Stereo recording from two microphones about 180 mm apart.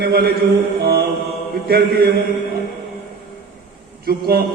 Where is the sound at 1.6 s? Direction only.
60° right (ahead or behind).